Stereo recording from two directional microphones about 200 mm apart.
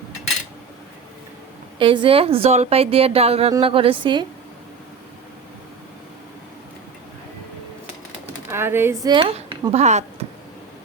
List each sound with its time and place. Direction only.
1.8 s a woman's voice: 25° right (ahead or behind)
8.4 s speech: 10° right (ahead or behind)
9.7 s speech: 35° right (ahead or behind)